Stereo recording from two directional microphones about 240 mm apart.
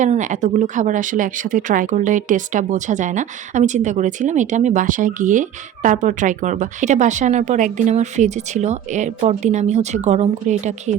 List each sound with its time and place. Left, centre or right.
0.0 s speech: right